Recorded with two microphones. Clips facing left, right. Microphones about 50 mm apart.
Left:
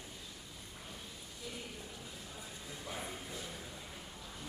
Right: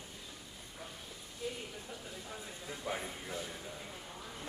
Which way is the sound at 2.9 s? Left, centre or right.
Right.